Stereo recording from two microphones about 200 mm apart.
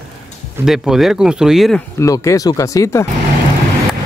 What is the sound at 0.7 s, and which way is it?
Speech, centre (ahead or behind).